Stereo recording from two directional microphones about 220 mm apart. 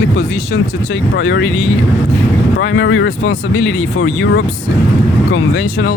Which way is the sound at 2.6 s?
60° left (ahead or behind).